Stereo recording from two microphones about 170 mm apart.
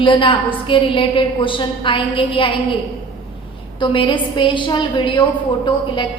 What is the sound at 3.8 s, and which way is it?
A woman's voice, 30° left (ahead or behind).